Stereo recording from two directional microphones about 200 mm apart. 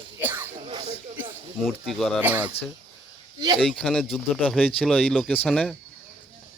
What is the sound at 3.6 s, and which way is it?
Speech, 5° left (ahead or behind).